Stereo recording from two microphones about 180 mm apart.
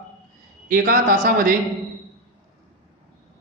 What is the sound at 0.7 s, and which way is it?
Speech, 50° right (ahead or behind).